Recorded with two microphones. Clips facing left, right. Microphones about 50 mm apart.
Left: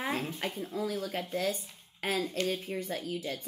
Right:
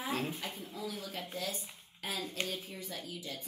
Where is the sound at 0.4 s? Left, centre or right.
Left.